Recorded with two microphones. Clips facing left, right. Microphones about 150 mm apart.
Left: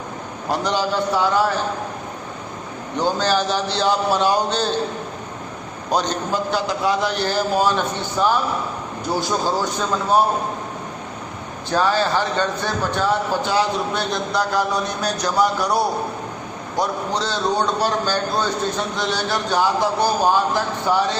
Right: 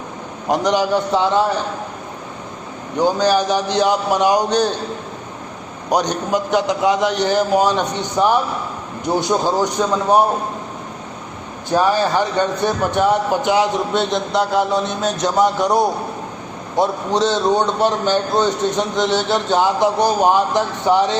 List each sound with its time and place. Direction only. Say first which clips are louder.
0.5 s a man's voice: right 5 dB; 15° right (ahead or behind)
3.0 s a man's voice: right 4 dB; 15° right (ahead or behind)
5.9 s a man's voice: right 3 dB; 15° right (ahead or behind)
11.7 s a man's voice: right 3 dB; 15° right (ahead or behind)